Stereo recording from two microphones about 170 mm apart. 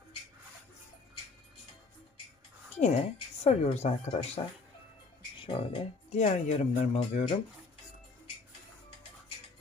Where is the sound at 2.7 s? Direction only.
40° left (ahead or behind).